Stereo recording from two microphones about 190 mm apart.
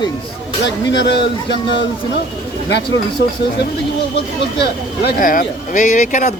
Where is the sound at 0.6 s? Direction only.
65° left (ahead or behind).